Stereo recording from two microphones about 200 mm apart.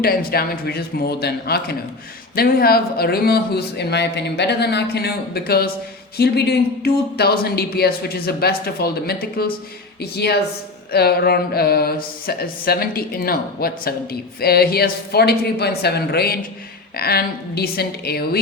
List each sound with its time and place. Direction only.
0.0 s a woman's voice: 50° left (ahead or behind)